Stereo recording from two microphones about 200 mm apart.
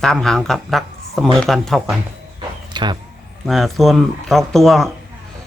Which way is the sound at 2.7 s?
20° right (ahead or behind).